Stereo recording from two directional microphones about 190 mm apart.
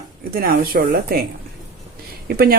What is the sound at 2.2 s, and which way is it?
Speech, 50° right (ahead or behind).